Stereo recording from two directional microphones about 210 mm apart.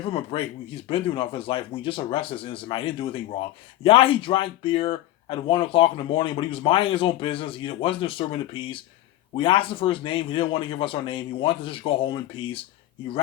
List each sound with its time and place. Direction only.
0.0 s speech: 25° left (ahead or behind)